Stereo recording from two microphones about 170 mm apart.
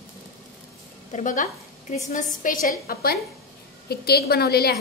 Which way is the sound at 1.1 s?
50° left (ahead or behind).